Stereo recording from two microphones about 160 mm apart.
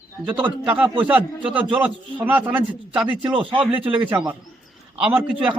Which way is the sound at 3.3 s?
30° right (ahead or behind).